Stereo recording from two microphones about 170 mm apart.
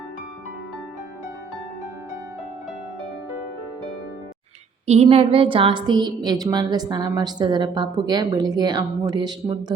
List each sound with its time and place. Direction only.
4.9 s a woman's voice: 35° right (ahead or behind)